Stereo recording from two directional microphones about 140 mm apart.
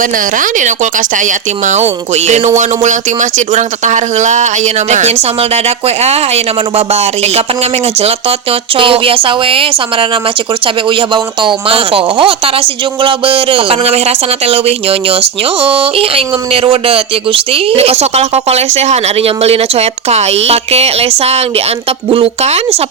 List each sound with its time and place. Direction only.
0.0 s speech: 70° right (ahead or behind); by 22.8 s 45° right (ahead or behind)